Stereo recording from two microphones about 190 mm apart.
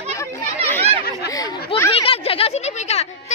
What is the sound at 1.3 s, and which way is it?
Chatter, 20° left (ahead or behind).